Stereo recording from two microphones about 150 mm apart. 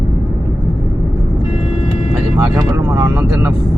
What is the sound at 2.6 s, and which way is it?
Speech, 15° right (ahead or behind).